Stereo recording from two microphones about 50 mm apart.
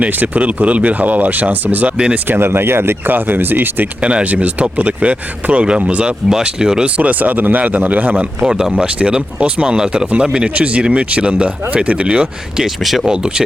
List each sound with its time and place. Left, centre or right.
0.0 s speech: right
2.4 s speech: right
4.0 s speech: right
6.8 s speech: right
8.4 s speech: centre
12.6 s speech: centre
13.1 s speech: centre